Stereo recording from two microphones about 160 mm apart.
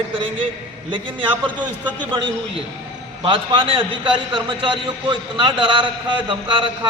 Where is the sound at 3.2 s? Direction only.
35° right (ahead or behind).